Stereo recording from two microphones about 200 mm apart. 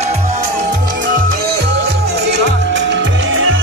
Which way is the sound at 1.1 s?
45° right (ahead or behind).